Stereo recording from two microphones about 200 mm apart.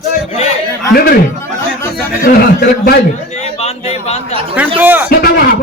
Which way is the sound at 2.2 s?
50° left (ahead or behind).